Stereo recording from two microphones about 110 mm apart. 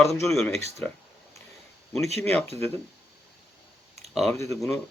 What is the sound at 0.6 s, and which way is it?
Speech, 80° right.